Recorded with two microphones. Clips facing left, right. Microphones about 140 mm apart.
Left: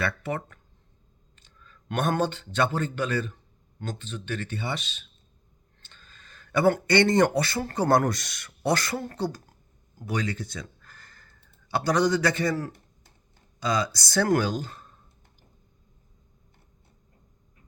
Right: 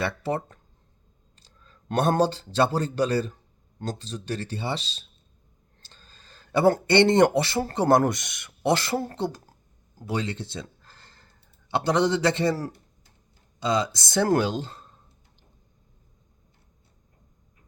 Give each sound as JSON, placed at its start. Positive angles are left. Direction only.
{"t": 0.0, "sound": "speech", "side_deg": -30}